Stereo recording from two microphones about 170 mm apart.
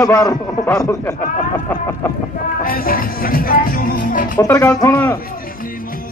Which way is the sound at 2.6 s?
60° left (ahead or behind).